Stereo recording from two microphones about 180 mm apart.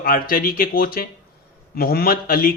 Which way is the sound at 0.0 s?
55° left (ahead or behind).